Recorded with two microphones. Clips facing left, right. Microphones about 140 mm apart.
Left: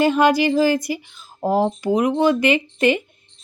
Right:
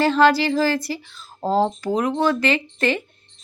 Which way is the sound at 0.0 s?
15° left (ahead or behind).